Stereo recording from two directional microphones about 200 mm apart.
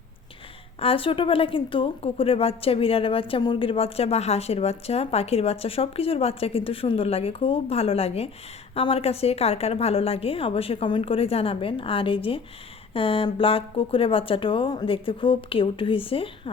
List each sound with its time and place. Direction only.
0.8 s a woman's voice: 30° left (ahead or behind)